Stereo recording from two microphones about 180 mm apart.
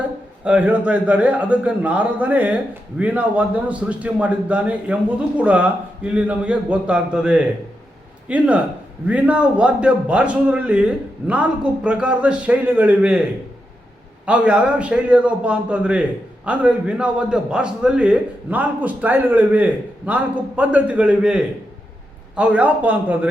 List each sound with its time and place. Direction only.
0.4 s a man's voice: 10° right (ahead or behind)
14.3 s a man's voice: 5° right (ahead or behind)